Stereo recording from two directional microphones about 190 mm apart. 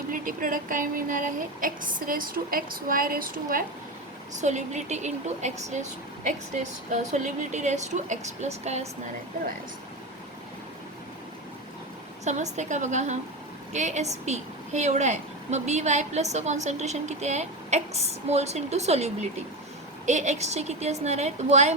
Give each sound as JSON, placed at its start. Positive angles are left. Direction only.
{"t": 0.1, "sound": "a woman's voice", "side_deg": -45}
{"t": 12.2, "sound": "a woman's voice", "side_deg": -40}